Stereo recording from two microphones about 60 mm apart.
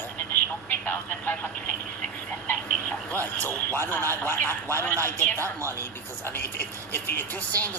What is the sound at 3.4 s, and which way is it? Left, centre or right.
Speech, left.